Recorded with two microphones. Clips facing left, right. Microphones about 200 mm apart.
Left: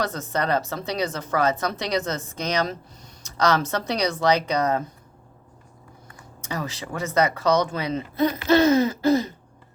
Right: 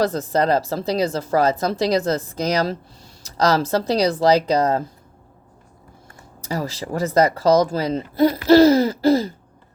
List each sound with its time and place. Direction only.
0.0 s speech: 35° right (ahead or behind)
6.1 s speech: 30° right (ahead or behind)